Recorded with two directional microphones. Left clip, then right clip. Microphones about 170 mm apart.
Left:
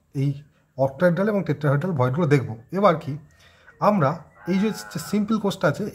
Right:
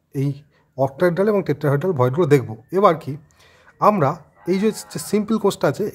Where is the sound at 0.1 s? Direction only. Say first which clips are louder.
Right 3 dB; 40° right (ahead or behind).